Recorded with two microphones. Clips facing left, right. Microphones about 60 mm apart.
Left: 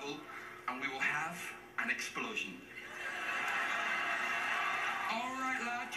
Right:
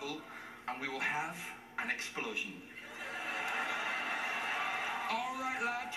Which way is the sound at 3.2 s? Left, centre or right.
Left.